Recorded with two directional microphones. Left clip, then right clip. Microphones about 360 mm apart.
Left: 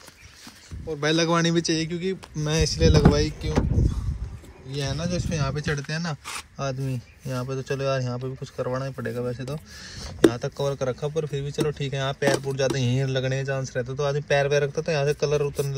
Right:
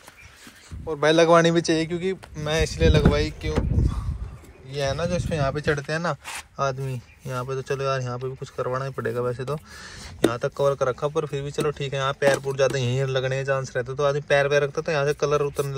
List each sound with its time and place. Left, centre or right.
1.0 s a man's voice: centre
8.9 s speech: right
9.9 s speech: centre